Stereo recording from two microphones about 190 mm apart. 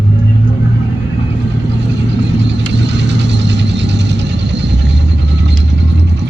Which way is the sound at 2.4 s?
65° right (ahead or behind).